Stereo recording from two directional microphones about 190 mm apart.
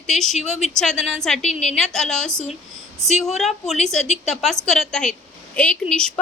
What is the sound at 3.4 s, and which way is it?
A woman's voice, centre (ahead or behind).